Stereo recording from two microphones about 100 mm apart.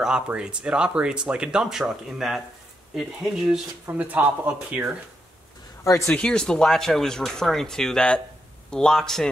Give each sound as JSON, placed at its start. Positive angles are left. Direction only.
{"t": 0.0, "sound": "speech", "side_deg": -10}
{"t": 3.9, "sound": "speech", "side_deg": -15}
{"t": 5.9, "sound": "speech", "side_deg": 30}
{"t": 6.1, "sound": "speech", "side_deg": 10}